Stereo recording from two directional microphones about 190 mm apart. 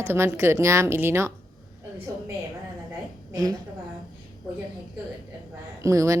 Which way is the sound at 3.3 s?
20° right (ahead or behind).